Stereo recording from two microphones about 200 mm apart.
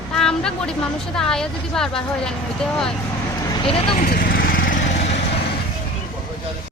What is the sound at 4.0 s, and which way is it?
Lawn mower, 45° left (ahead or behind).